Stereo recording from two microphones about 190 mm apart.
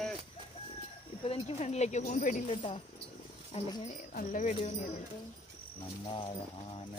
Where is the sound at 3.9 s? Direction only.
45° left (ahead or behind).